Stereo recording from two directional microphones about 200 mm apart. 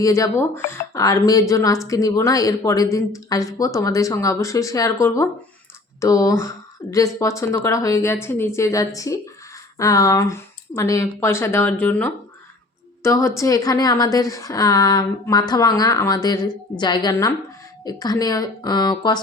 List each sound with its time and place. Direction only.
0.0 s a woman's voice: 15° left (ahead or behind)